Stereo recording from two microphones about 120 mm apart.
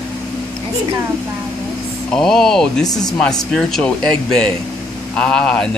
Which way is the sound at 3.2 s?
5° left (ahead or behind).